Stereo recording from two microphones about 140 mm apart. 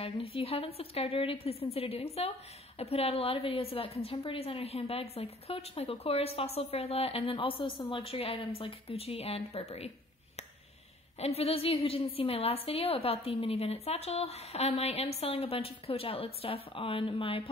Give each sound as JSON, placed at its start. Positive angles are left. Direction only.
{"t": 0.0, "sound": "a woman's voice", "side_deg": 45}
{"t": 11.1, "sound": "a woman's voice", "side_deg": 45}